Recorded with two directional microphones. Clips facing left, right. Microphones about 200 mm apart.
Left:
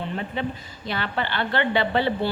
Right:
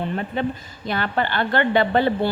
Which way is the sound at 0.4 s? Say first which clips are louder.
Right 4 dB; 50° right (ahead or behind).